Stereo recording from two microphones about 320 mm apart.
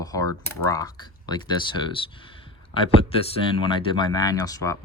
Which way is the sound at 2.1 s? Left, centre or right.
Centre.